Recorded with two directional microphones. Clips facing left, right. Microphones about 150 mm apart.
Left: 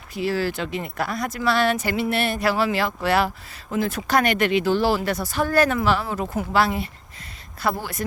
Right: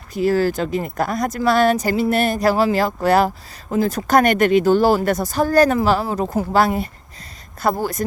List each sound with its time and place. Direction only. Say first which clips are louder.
0.1 s speech: right 6 dB; 45° right (ahead or behind)